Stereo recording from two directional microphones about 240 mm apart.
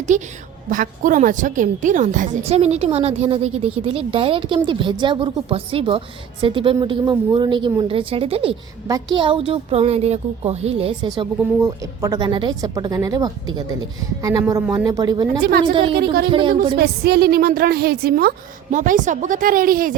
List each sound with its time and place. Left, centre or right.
0.1 s a woman's voice: right
11.2 s a woman's voice: centre
16.7 s a woman's voice: right